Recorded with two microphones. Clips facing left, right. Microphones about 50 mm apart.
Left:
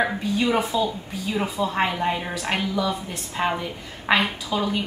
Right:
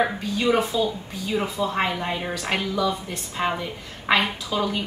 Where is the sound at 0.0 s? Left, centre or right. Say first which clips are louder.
Even; centre.